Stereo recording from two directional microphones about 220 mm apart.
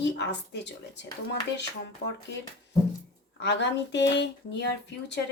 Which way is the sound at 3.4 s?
50° left (ahead or behind).